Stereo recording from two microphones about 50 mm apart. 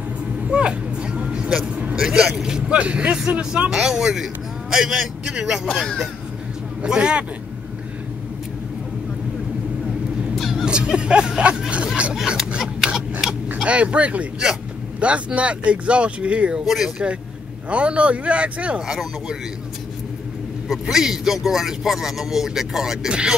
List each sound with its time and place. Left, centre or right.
0.5 s vehicle: centre
2.0 s speech: centre
3.8 s a man's voice: centre
6.9 s speech: centre
10.3 s vehicle: centre
10.6 s speech: centre
12.4 s a sound: centre
13.7 s speech: right
16.6 s speech: centre
17.6 s speech: right
18.9 s speech: centre
20.8 s speech: centre